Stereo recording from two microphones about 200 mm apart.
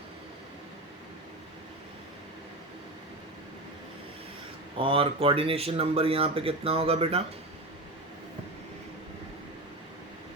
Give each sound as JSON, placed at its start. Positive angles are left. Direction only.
{"t": 4.8, "sound": "speech", "side_deg": -25}